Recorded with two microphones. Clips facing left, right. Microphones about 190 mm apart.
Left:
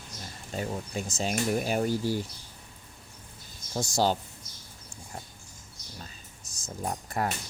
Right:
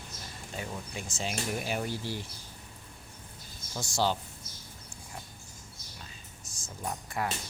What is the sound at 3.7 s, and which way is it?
Speech, 40° left (ahead or behind).